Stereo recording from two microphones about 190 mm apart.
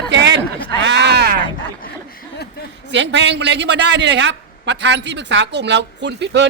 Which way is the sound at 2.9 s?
70° right (ahead or behind).